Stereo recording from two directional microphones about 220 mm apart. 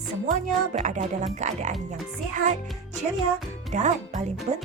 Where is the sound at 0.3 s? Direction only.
35° right (ahead or behind).